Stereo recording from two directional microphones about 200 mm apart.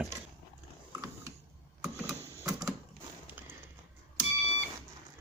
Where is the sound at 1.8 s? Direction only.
15° right (ahead or behind).